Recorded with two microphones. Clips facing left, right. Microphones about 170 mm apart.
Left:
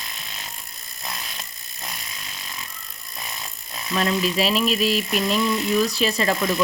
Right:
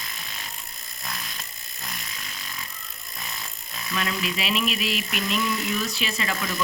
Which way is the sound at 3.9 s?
35° left (ahead or behind).